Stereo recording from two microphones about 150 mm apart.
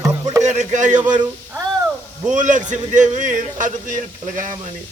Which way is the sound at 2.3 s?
55° right (ahead or behind).